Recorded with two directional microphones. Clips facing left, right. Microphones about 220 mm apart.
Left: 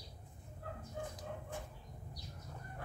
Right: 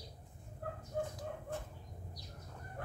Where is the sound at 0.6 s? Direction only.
45° right (ahead or behind).